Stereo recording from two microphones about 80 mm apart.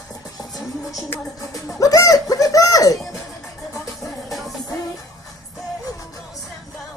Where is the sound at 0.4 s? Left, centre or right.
Left.